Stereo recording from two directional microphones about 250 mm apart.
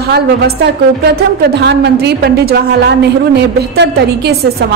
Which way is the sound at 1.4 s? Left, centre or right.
Right.